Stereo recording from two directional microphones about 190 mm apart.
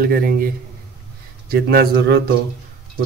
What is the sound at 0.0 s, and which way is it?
Speech, 50° right (ahead or behind).